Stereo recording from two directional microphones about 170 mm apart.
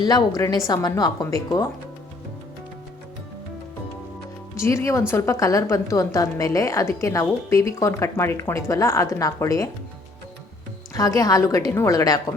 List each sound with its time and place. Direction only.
0.0 s a woman's voice: 20° left (ahead or behind)
4.5 s a woman's voice: 15° left (ahead or behind)
10.9 s a woman's voice: 20° left (ahead or behind)